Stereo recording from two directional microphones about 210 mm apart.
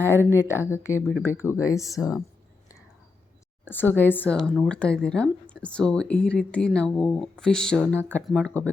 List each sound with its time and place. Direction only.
0.3 s speech: 10° left (ahead or behind)
2.0 s speech: 5° right (ahead or behind)
3.7 s speech: 10° left (ahead or behind)